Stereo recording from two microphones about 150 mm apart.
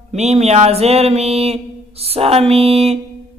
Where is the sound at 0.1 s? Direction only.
50° right (ahead or behind).